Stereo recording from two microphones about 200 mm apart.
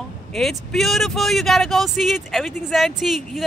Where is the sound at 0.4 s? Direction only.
Centre (ahead or behind).